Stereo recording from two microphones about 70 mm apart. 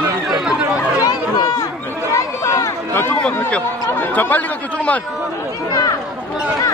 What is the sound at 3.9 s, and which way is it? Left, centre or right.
Speech, left.